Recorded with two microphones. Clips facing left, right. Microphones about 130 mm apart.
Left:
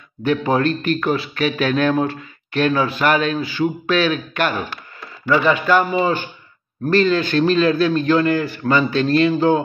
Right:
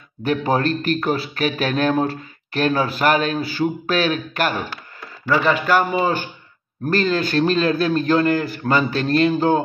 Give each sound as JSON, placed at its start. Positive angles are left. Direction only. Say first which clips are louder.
{"t": 0.2, "sound": "a man's voice", "louder": "left 2 dB", "side_deg": -40}
{"t": 6.9, "sound": "a man's voice", "louder": "left 3 dB", "side_deg": -40}